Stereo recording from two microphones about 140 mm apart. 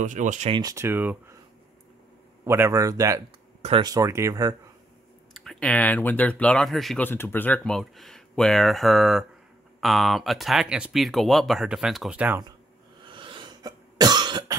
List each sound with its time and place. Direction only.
0.0 s speech: 60° right (ahead or behind)
0.5 s speech: 30° right (ahead or behind)
0.7 s speech: 15° right (ahead or behind)
2.4 s speech: 20° right (ahead or behind)
5.3 s speech: 5° left (ahead or behind)
7.0 s speech: 15° left (ahead or behind); by 12.2 s 5° right (ahead or behind)
12.2 s speech: 15° right (ahead or behind)
13.0 s cough: 35° right (ahead or behind)